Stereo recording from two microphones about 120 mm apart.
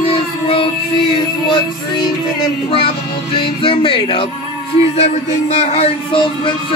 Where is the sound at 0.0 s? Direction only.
50° left (ahead or behind).